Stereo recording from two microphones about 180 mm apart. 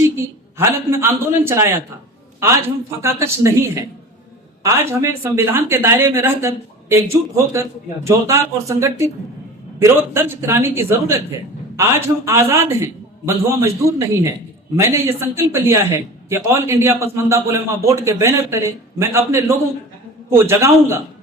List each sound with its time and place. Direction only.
0.5 s a man's voice: 15° right (ahead or behind)
3.0 s a man's voice: 15° right (ahead or behind)